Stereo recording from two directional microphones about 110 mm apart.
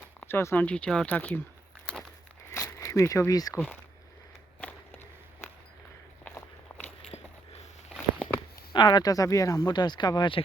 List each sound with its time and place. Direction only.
0.2 s speech: 20° left (ahead or behind)
2.5 s a sound: 25° left (ahead or behind)
4.6 s walk: 15° left (ahead or behind)
6.7 s walk: 20° left (ahead or behind)
7.1 s biting: 70° left (ahead or behind)
8.7 s speech: 40° left (ahead or behind)